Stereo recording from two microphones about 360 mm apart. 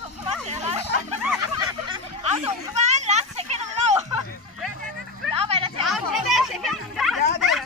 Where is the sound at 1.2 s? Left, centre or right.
Centre.